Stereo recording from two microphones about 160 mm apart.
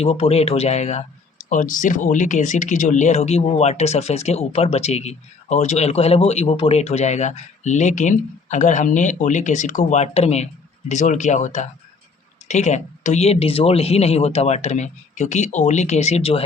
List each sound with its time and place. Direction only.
0.0 s speech: 40° left (ahead or behind)